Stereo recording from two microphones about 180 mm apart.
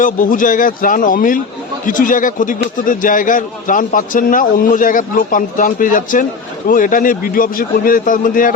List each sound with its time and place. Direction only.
0.0 s a man's voice: 45° left (ahead or behind)